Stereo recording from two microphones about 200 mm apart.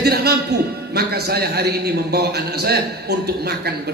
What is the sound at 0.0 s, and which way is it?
A man's voice, 55° right (ahead or behind).